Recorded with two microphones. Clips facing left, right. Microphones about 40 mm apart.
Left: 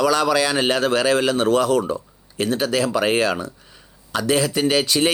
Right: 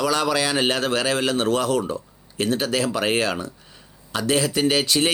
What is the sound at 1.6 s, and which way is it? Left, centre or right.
Speech, left.